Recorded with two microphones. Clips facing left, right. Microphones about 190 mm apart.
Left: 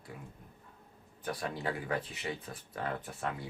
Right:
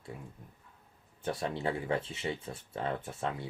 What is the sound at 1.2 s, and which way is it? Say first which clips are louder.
Speech: right 3 dB; 25° right (ahead or behind).